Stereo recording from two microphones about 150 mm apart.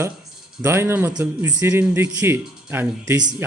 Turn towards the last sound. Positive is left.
turn(degrees=-15)  # may be behind; listen again after turning